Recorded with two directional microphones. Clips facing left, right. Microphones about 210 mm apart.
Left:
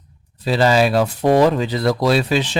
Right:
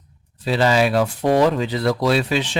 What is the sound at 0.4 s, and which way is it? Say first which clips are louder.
Speech: left 2 dB; 40° left (ahead or behind).